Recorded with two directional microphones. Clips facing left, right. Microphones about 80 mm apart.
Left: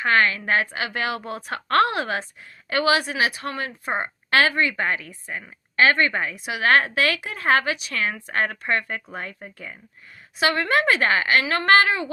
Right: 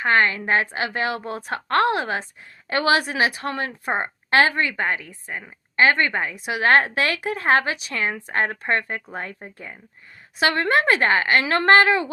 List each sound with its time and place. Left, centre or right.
0.0 s a woman's voice: right
2.6 s a woman's voice: right
3.9 s a woman's voice: right